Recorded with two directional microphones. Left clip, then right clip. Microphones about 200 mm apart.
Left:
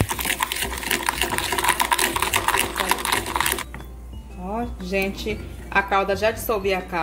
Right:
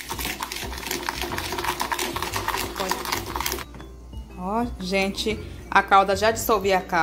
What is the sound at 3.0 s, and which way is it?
Sewing machine, 15° left (ahead or behind).